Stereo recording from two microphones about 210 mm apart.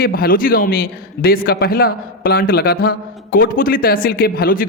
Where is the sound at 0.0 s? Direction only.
45° left (ahead or behind).